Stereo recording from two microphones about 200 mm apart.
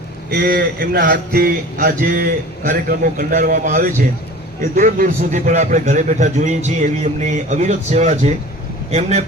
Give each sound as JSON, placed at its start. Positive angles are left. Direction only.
{"t": 0.3, "sound": "a man's voice", "side_deg": -50}